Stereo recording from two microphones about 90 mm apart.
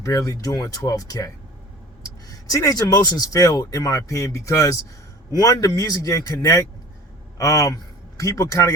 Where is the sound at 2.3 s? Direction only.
40° left (ahead or behind).